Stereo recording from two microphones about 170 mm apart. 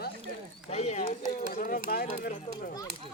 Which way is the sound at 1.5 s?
60° left (ahead or behind).